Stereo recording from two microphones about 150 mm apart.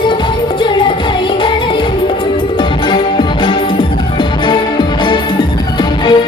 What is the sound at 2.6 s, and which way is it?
Music, 35° left (ahead or behind).